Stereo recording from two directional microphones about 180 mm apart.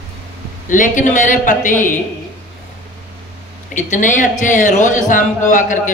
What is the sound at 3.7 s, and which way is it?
A man's voice, 45° left (ahead or behind).